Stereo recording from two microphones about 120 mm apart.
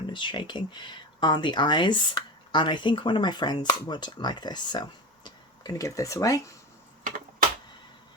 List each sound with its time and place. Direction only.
0.1 s speech: 40° left (ahead or behind)